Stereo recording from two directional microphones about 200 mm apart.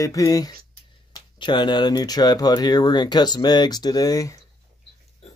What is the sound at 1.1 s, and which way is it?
Speech, 25° left (ahead or behind).